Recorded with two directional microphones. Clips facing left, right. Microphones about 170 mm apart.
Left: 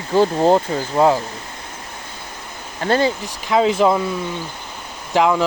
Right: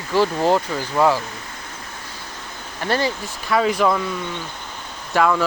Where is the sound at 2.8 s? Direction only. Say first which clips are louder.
Left 4 dB; 20° left (ahead or behind).